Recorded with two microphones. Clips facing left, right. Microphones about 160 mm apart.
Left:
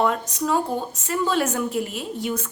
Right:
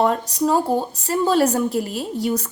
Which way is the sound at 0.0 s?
35° right (ahead or behind).